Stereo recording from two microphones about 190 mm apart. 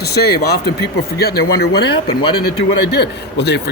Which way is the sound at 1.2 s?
60° left (ahead or behind).